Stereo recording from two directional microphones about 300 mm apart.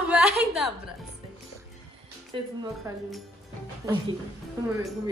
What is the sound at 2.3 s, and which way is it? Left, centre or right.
Speech, centre.